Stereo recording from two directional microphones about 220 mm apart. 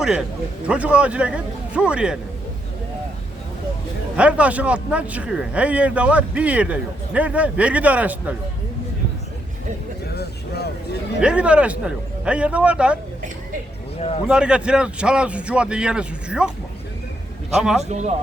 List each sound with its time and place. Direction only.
0.0 s speech: 5° right (ahead or behind)
4.2 s speech: 5° right (ahead or behind)
11.2 s speech: 5° right (ahead or behind)
14.3 s speech: 5° right (ahead or behind)
17.5 s speech: centre (ahead or behind)
17.8 s speech: 30° right (ahead or behind)